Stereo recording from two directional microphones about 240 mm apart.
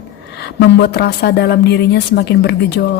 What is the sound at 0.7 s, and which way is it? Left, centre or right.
A woman's voice, left.